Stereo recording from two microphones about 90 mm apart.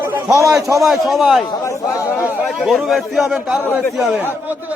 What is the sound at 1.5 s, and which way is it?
Speech, 35° left (ahead or behind).